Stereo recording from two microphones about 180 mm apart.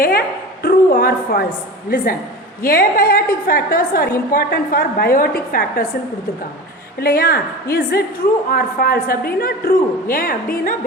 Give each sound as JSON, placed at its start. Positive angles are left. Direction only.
{"t": 0.0, "sound": "a sound", "side_deg": 60}
{"t": 2.6, "sound": "a woman's voice", "side_deg": 55}
{"t": 7.0, "sound": "a woman's voice", "side_deg": 55}